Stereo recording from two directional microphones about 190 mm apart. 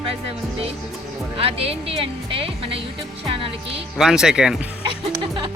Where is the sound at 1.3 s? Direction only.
30° right (ahead or behind).